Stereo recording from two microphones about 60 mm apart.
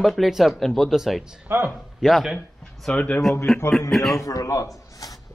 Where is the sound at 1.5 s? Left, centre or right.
Right.